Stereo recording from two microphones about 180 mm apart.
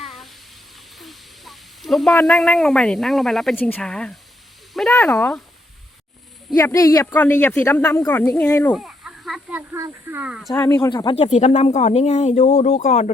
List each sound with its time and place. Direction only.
0.0 s bathtub: centre (ahead or behind)
0.9 s snake: centre (ahead or behind)
2.1 s speech: 5° left (ahead or behind)
6.6 s speech: 15° left (ahead or behind)
8.7 s a sound: centre (ahead or behind)
9.7 s speech: 15° right (ahead or behind)
10.5 s speech: 15° left (ahead or behind)
11.2 s speech: 35° left (ahead or behind)